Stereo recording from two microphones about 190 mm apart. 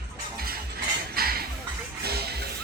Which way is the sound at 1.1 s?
55° right (ahead or behind).